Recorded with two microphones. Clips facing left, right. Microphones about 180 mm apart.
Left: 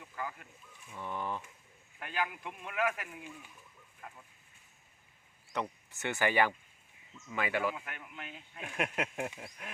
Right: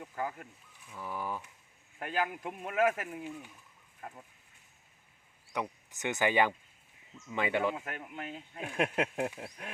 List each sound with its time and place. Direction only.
0.0 s a sound: 45° right (ahead or behind)
0.9 s speech: 5° right (ahead or behind)
2.0 s speech: 40° right (ahead or behind)
5.5 s speech: 15° right (ahead or behind)
7.9 s speech: 40° right (ahead or behind)